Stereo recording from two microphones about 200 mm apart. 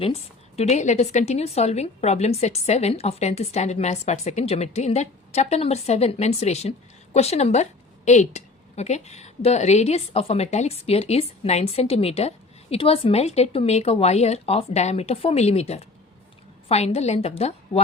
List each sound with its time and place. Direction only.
0.0 s a woman's voice: 30° left (ahead or behind)